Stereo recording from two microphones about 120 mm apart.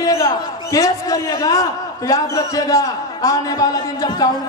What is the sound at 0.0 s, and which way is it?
A man's voice, 30° left (ahead or behind).